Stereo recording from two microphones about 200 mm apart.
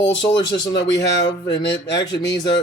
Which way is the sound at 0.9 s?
65° left (ahead or behind).